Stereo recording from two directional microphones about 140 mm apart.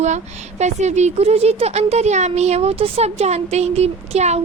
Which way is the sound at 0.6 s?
55° right (ahead or behind).